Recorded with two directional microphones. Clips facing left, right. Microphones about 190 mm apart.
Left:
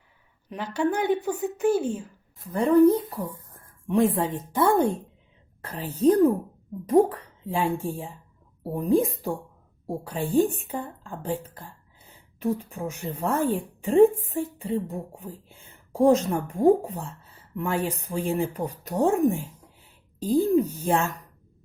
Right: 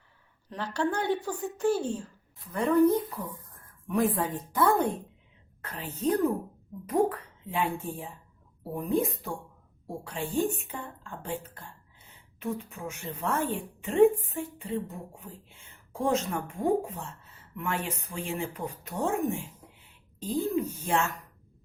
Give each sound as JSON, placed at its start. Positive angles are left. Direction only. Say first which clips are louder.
{"t": 0.5, "sound": "a woman's voice", "louder": "left 4 dB", "side_deg": 10}
{"t": 1.4, "sound": "speech", "louder": "left 4 dB", "side_deg": 10}
{"t": 2.4, "sound": "a woman's voice", "louder": "left 5 dB", "side_deg": 30}
{"t": 20.2, "sound": "a woman's voice", "louder": "left 8 dB", "side_deg": 40}